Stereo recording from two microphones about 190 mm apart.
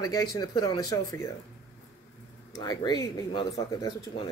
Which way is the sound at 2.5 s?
20° left (ahead or behind).